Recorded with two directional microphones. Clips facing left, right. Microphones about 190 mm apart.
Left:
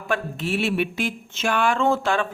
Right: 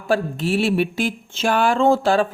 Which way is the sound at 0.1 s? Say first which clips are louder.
Right 5 dB; 35° right (ahead or behind).